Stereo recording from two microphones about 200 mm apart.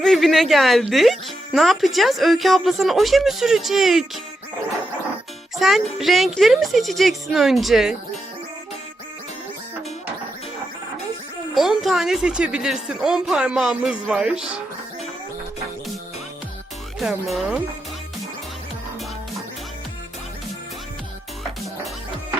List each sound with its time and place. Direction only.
0.0 s speech: centre (ahead or behind)
5.5 s speech: centre (ahead or behind)
11.5 s speech: centre (ahead or behind)
17.0 s speech: centre (ahead or behind)